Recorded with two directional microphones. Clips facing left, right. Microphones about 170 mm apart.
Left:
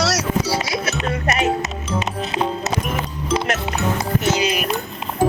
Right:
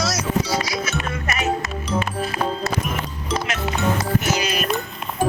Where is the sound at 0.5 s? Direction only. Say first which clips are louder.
Left 1 dB; 25° left (ahead or behind).